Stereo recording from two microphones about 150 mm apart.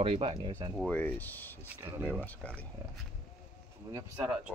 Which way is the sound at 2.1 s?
10° left (ahead or behind).